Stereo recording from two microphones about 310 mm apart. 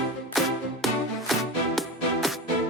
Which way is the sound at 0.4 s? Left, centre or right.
Centre.